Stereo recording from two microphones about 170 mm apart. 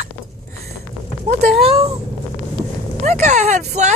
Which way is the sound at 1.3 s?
40° right (ahead or behind).